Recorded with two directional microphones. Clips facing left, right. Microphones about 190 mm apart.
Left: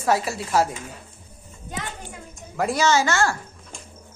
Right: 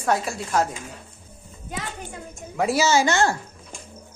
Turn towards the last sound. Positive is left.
turn(degrees=-20)  # may be behind; listen again after turning